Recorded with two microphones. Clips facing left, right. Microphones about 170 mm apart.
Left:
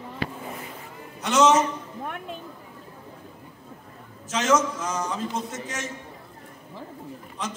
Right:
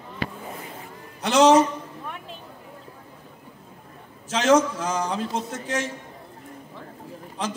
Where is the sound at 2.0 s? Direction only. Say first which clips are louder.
Left 3 dB; 50° left (ahead or behind).